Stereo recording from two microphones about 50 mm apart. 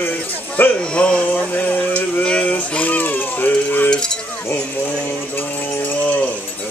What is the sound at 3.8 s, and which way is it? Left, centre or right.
Cowbell, centre.